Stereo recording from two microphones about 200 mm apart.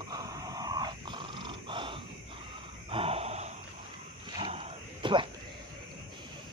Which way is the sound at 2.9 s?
30° right (ahead or behind).